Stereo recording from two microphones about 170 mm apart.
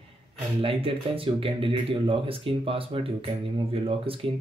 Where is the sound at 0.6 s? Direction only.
35° right (ahead or behind).